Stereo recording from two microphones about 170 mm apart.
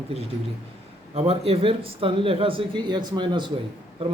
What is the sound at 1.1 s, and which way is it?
Speech, 35° right (ahead or behind).